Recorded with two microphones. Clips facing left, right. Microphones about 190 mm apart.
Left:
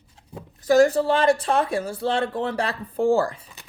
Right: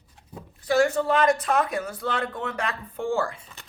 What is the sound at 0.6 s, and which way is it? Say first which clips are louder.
Speech: left 5 dB; 40° left (ahead or behind).